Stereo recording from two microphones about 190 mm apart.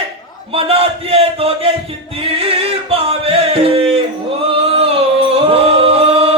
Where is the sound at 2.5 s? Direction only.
30° right (ahead or behind).